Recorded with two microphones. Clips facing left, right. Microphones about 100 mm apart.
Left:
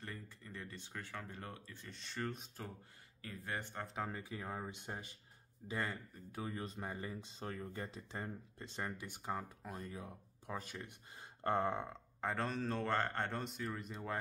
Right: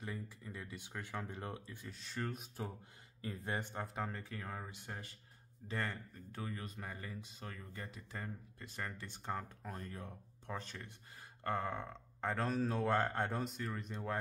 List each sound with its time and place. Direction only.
0.0 s speech: 10° right (ahead or behind)
3.2 s a man's voice: 25° right (ahead or behind)
3.8 s speech: centre (ahead or behind)
4.2 s speech: 15° left (ahead or behind)
11.9 s speech: centre (ahead or behind)